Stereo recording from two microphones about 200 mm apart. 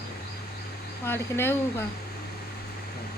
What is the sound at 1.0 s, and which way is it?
Speech, 10° left (ahead or behind).